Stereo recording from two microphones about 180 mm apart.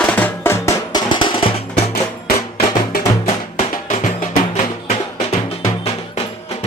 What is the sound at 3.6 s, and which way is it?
Music, 45° left (ahead or behind).